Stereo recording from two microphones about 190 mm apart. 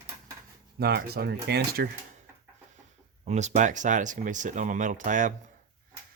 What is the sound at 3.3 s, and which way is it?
Speech, 40° right (ahead or behind).